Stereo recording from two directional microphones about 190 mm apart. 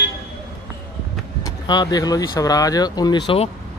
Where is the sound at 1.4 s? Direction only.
20° left (ahead or behind).